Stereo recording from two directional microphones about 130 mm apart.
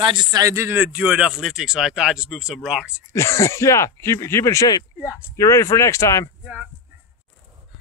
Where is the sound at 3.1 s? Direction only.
20° left (ahead or behind).